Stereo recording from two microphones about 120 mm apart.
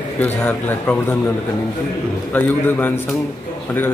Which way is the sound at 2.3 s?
15° left (ahead or behind).